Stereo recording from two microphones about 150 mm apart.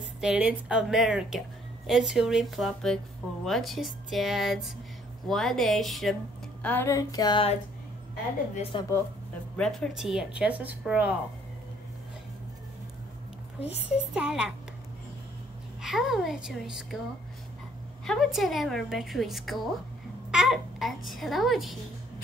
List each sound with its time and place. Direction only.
0.2 s a woman's voice: 5° right (ahead or behind)
6.6 s a sound: 15° left (ahead or behind)
8.7 s a woman's voice: 35° left (ahead or behind)
9.6 s speech: 5° left (ahead or behind)
13.6 s a child's voice: 45° left (ahead or behind)
14.1 s a woman's voice: 5° right (ahead or behind)
15.8 s a woman's voice: centre (ahead or behind)
18.0 s a woman's voice: centre (ahead or behind)